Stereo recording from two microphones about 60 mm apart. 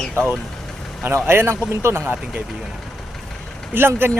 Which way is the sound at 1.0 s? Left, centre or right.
Right.